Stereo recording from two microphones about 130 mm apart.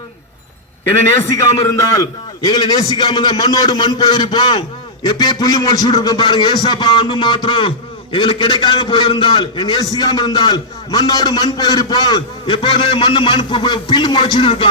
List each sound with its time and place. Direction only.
1.2 s a man's voice: 25° left (ahead or behind); by 14.7 s 40° left (ahead or behind)